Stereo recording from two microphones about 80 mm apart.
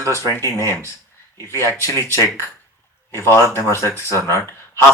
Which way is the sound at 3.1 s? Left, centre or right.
Left.